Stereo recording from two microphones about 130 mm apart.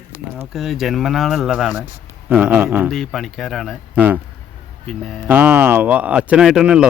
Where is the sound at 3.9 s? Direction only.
10° right (ahead or behind).